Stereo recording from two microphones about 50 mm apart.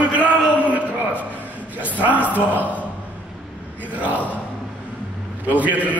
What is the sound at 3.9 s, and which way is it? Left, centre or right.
Speech, right.